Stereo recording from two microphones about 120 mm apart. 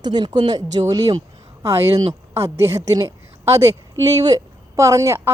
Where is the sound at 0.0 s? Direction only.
35° right (ahead or behind).